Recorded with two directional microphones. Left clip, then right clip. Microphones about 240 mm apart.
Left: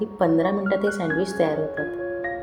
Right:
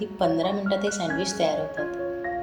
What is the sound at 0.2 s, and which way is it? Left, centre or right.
A woman's voice, left.